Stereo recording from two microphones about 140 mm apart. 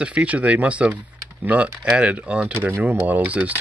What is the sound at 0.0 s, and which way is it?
Speech, 10° right (ahead or behind).